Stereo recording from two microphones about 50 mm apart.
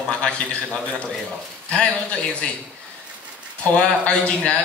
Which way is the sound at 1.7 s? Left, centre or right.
Centre.